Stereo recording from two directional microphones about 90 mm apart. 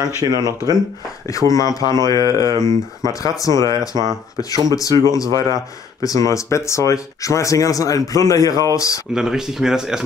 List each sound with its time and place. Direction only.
0.2 s speech: 45° right (ahead or behind)
1.3 s speech: 40° left (ahead or behind)
3.9 s speech: 45° right (ahead or behind)
4.4 s speech: 40° left (ahead or behind)
9.1 s speech: 5° right (ahead or behind)